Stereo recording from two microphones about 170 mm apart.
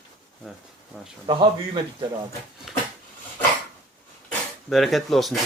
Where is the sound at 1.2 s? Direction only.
30° right (ahead or behind).